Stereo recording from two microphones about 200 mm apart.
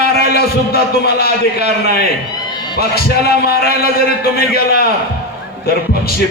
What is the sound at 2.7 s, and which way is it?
A man's voice, 50° left (ahead or behind).